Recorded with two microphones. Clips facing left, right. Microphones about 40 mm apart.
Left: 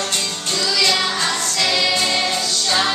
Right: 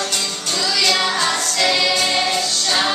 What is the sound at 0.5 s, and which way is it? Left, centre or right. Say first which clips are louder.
Music: even; centre.